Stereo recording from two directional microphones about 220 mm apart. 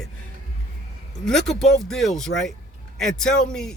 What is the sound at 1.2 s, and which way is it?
A man's voice, centre (ahead or behind).